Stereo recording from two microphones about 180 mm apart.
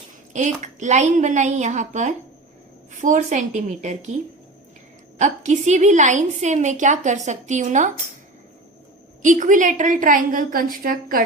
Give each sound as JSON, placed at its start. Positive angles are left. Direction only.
{"t": 0.3, "sound": "a woman's voice", "side_deg": -40}
{"t": 5.1, "sound": "a woman's voice", "side_deg": -40}
{"t": 9.2, "sound": "a woman's voice", "side_deg": -45}